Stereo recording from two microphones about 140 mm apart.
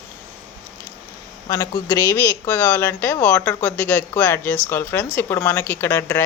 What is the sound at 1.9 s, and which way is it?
Speech, 20° left (ahead or behind).